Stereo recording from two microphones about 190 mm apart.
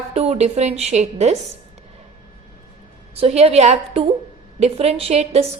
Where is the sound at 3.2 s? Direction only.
35° right (ahead or behind).